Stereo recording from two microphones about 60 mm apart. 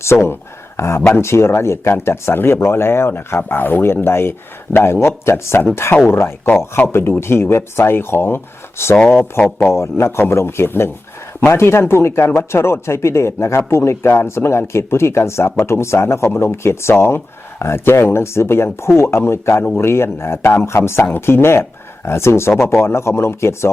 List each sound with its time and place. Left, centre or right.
0.0 s speech: left